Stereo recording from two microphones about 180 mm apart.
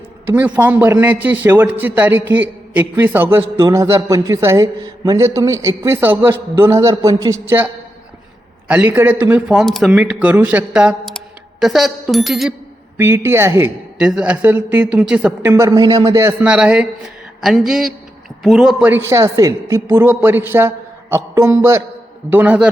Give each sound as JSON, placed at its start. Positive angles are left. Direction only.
{"t": 0.3, "sound": "a man's voice", "side_deg": -10}
{"t": 8.6, "sound": "a man's voice", "side_deg": -10}
{"t": 13.0, "sound": "a man's voice", "side_deg": -15}